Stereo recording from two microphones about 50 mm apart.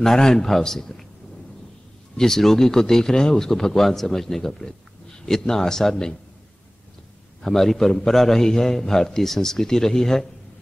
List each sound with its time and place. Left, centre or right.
0.0 s a man's voice: centre
2.1 s a man's voice: centre
7.4 s a man's voice: centre